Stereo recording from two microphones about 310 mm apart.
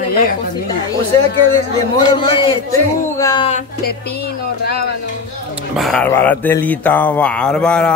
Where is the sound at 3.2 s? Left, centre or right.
Centre.